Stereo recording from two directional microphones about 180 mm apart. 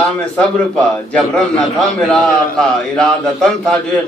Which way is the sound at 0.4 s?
5° left (ahead or behind).